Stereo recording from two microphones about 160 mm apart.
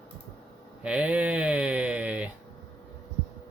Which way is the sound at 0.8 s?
5° right (ahead or behind).